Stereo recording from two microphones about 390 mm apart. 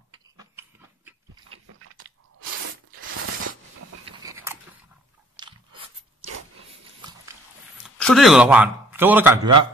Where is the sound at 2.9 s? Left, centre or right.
Right.